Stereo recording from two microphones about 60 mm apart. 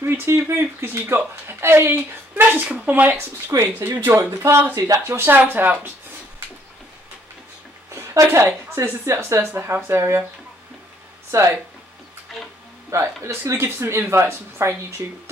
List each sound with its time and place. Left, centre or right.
0.0 s speech: right
0.3 s speech: right
0.8 s speech: right
2.0 s speech: right
3.0 s speech: right
8.1 s a woman's voice: right
9.2 s speech: right
11.3 s speech: right
13.2 s speech: right